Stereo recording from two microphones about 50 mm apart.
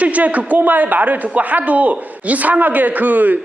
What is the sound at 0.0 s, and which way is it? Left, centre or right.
A man's voice, right.